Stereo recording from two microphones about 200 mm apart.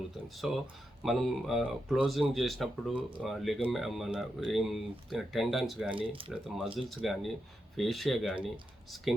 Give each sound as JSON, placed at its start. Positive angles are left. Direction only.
{"t": 0.3, "sound": "speech", "side_deg": 0}
{"t": 6.0, "sound": "speech", "side_deg": -25}
{"t": 6.3, "sound": "speech", "side_deg": 0}